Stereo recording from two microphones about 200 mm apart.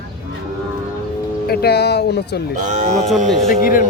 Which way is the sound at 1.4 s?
50° left (ahead or behind).